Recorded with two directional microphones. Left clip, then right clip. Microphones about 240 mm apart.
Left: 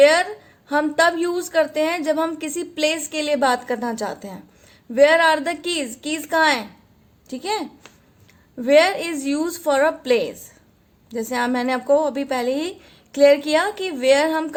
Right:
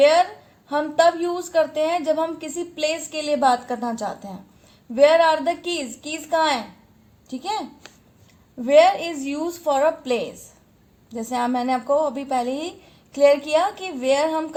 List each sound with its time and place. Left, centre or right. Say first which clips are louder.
0.0 s a sound: left 1 dB; left
0.7 s a woman's voice: even; left
8.6 s a woman's voice: right 1 dB; left